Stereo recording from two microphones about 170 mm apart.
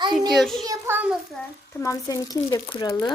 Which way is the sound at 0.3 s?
Centre (ahead or behind).